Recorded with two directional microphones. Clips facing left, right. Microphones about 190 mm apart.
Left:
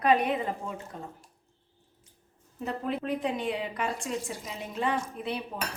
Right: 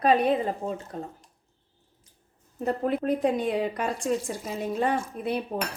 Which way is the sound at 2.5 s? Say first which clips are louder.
Right 6 dB; 45° right (ahead or behind).